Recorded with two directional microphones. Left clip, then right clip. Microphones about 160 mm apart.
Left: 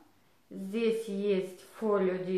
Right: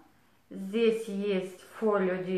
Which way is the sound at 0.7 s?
10° left (ahead or behind).